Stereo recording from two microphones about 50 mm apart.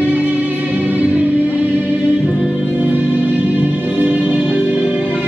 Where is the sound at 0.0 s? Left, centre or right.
Right.